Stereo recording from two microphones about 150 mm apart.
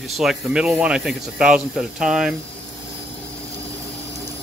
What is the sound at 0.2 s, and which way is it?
Speech, 5° right (ahead or behind).